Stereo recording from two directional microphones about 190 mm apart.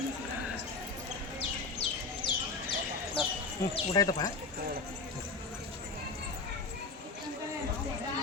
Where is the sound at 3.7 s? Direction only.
20° left (ahead or behind).